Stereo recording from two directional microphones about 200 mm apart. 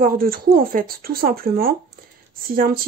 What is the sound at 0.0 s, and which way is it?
Speech, 45° right (ahead or behind).